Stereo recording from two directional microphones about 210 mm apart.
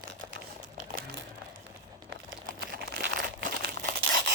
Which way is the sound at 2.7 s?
50° right (ahead or behind).